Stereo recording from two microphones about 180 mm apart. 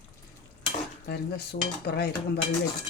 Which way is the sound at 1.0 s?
65° left (ahead or behind).